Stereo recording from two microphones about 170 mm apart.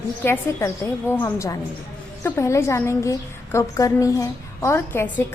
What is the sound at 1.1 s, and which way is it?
A woman's voice, 15° left (ahead or behind).